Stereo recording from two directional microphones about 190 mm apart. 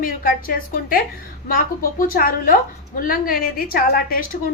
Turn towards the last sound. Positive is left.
turn(degrees=50)  # may be behind; listen again after turning